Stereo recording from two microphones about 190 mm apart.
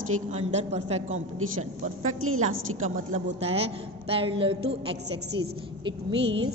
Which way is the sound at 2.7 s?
40° right (ahead or behind).